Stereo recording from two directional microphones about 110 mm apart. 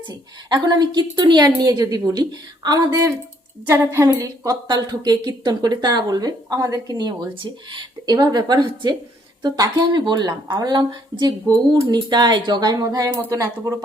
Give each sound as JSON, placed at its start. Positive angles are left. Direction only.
{"t": 0.1, "sound": "speech", "side_deg": -40}
{"t": 4.1, "sound": "speech", "side_deg": -35}